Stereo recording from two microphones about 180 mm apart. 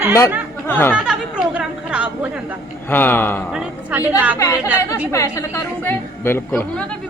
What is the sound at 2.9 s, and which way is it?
Speech, 10° left (ahead or behind).